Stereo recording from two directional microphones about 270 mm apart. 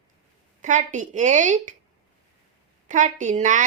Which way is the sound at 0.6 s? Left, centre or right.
Right.